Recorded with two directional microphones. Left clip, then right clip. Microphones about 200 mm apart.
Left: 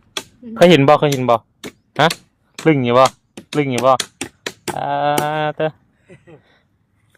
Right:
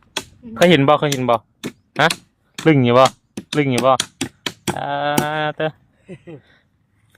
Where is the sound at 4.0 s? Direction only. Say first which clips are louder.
Right 1 dB; 55° right (ahead or behind).